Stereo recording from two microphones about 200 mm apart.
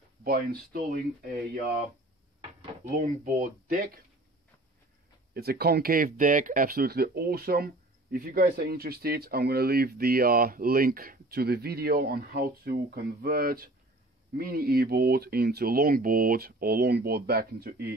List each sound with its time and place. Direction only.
0.2 s speech: 45° right (ahead or behind)
3.3 s speech: 45° right (ahead or behind)
5.3 s speech: 50° right (ahead or behind)